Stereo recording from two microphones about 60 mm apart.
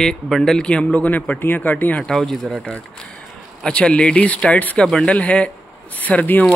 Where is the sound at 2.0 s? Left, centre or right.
Centre.